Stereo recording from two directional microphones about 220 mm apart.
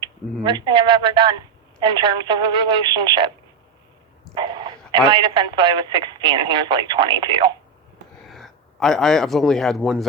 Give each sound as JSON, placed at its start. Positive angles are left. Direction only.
{"t": 0.4, "sound": "speech", "side_deg": -20}
{"t": 4.4, "sound": "a sound", "side_deg": -20}
{"t": 4.9, "sound": "speech", "side_deg": -20}
{"t": 8.3, "sound": "a man's voice", "side_deg": 0}